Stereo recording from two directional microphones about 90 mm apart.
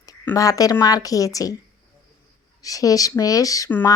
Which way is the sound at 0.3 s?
40° left (ahead or behind).